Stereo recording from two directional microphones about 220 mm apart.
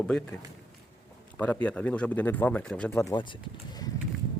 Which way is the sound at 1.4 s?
5° left (ahead or behind).